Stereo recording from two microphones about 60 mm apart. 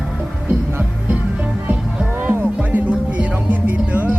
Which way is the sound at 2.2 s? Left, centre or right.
Right.